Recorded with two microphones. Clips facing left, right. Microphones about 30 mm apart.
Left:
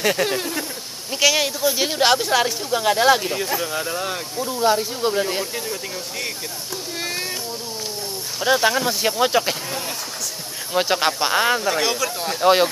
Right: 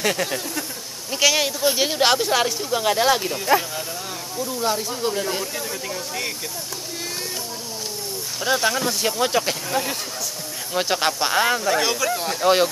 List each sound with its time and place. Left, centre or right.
0.2 s speech: centre
1.1 s speech: centre
3.5 s speech: right
3.9 s speech: left
4.5 s speech: centre
8.4 s speech: centre
9.7 s speech: centre
10.7 s speech: centre